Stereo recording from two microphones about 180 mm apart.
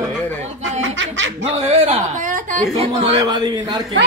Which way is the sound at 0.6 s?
90° right.